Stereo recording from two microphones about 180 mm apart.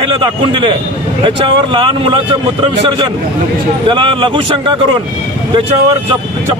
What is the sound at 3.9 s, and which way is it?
A man's voice, 30° right (ahead or behind).